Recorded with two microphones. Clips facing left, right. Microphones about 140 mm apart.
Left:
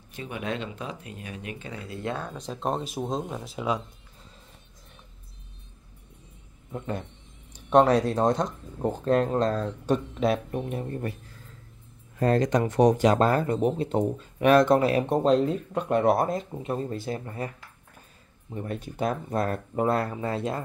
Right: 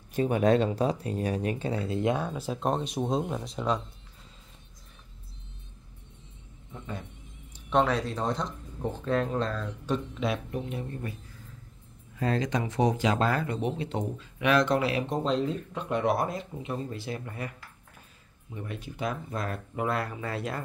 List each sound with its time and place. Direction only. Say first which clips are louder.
0.1 s speech: right 10 dB; 40° right (ahead or behind); by 3.8 s 5° left (ahead or behind)
6.7 s speech: left 7 dB; 60° left (ahead or behind)
7.7 s speech: left 6 dB; 45° left (ahead or behind)
12.2 s speech: left 6 dB; 50° left (ahead or behind)
18.5 s speech: left 5 dB; 40° left (ahead or behind); by 20.6 s 25° left (ahead or behind)